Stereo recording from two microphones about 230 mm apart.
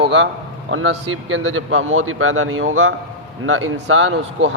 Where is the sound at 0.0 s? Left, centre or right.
Right.